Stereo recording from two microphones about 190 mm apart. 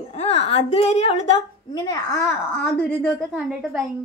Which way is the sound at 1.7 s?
20° left (ahead or behind).